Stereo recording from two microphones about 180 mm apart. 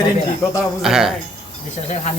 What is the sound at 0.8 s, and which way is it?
Speech, centre (ahead or behind).